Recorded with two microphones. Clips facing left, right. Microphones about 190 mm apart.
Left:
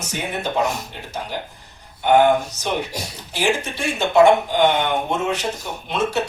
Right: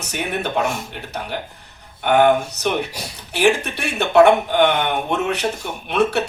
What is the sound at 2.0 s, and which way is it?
Speech, 65° right (ahead or behind).